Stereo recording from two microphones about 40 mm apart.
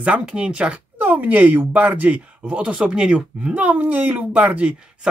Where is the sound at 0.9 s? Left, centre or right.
Right.